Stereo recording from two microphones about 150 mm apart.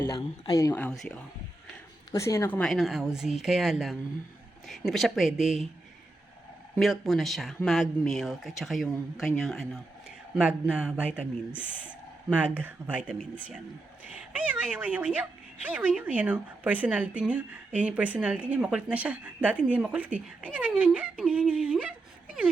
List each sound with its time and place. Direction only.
0.2 s speech: 25° left (ahead or behind)
0.8 s speech: 5° left (ahead or behind)
2.1 s speech: 20° left (ahead or behind)
2.6 s speech: centre (ahead or behind)
6.7 s a woman's voice: centre (ahead or behind)